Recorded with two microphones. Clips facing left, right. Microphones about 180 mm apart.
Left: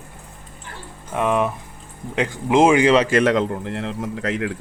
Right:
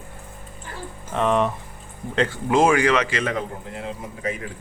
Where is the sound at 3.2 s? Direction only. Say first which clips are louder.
Left 8 dB; 85° left.